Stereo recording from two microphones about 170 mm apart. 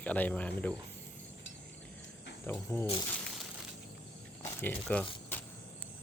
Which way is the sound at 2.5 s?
10° left (ahead or behind).